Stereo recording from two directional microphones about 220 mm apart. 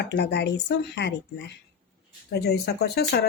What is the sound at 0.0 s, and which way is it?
Speech, 50° left (ahead or behind).